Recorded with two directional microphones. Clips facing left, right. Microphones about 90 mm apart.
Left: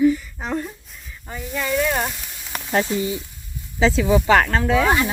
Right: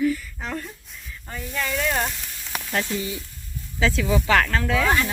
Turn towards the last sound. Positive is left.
turn(degrees=15)  # may be behind; listen again after turning